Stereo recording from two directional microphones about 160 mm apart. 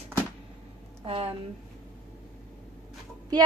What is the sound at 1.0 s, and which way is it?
Speech, 35° right (ahead or behind).